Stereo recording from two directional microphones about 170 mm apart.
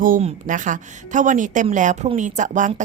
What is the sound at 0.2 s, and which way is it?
Speech, 45° right (ahead or behind).